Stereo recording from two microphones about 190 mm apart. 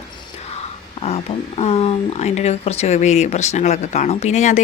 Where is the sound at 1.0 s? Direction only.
30° left (ahead or behind).